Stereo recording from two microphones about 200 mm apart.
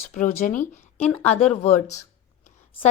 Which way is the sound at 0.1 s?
40° left (ahead or behind).